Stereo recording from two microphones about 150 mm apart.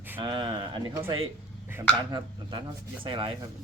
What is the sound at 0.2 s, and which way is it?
Speech, 30° right (ahead or behind).